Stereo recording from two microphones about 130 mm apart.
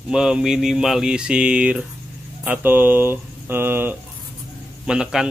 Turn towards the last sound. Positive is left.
turn(degrees=-5)  # may be behind; listen again after turning